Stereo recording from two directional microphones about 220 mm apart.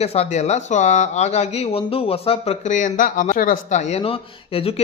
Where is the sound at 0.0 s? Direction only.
30° left (ahead or behind).